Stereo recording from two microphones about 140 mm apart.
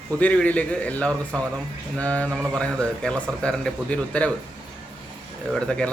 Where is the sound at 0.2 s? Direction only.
10° left (ahead or behind).